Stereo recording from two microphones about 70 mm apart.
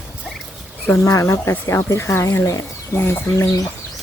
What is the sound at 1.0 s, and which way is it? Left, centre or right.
Speech, left.